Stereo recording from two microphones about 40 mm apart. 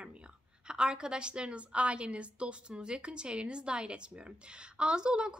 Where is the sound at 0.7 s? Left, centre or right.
Right.